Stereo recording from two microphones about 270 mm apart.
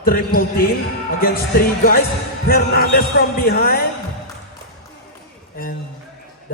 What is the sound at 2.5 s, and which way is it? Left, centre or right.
Speech, left.